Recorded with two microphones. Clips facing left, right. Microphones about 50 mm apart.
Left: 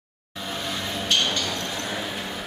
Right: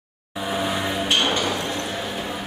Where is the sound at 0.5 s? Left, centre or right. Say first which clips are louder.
Right 6 dB; centre.